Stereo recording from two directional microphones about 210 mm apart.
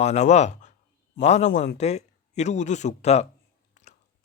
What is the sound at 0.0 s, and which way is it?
Speech, 30° left (ahead or behind).